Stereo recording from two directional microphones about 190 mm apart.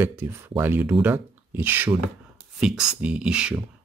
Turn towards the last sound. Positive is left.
turn(degrees=-5)  # may be behind; listen again after turning